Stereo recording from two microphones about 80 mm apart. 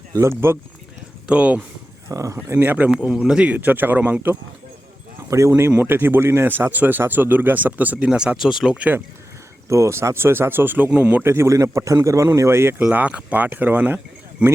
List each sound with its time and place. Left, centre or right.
0.1 s speech: right
1.3 s speech: centre
2.0 s speech: right
5.3 s speech: right
5.7 s speech: right; by 8.8 s centre
9.6 s speech: right
12.9 s speech: centre